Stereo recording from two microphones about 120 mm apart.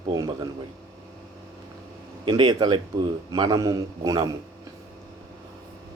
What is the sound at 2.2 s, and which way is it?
A man's voice, 40° right (ahead or behind).